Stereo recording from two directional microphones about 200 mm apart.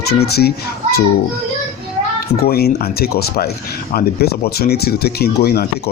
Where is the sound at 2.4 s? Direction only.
50° left (ahead or behind).